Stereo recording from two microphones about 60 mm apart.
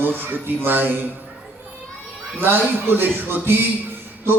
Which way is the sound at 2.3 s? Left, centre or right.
Right.